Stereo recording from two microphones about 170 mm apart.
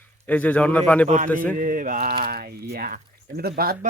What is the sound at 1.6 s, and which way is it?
Mantra, 50° right (ahead or behind).